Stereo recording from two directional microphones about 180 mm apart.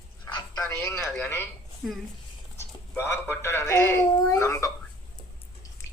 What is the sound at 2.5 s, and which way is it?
Speech, 15° left (ahead or behind).